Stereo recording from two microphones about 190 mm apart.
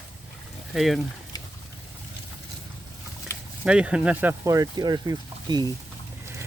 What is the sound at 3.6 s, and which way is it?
Speech, 5° right (ahead or behind).